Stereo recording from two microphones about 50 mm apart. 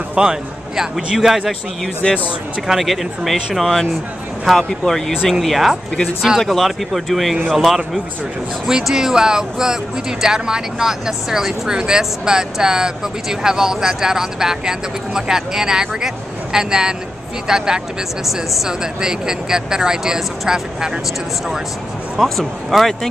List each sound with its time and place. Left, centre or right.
0.1 s a man's voice: centre
0.9 s speech: centre
2.0 s speech: left
2.7 s speech: centre
5.1 s speech: centre
22.2 s speech: centre